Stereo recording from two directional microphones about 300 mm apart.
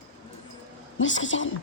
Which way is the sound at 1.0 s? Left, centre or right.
Left.